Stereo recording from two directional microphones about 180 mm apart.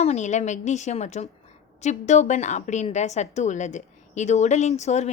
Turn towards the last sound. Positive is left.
turn(degrees=40)  # may be behind; listen again after turning